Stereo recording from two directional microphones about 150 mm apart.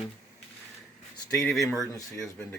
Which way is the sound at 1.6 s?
Centre (ahead or behind).